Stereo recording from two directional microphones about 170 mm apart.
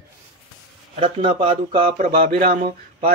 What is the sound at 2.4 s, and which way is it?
Speech, 60° right (ahead or behind).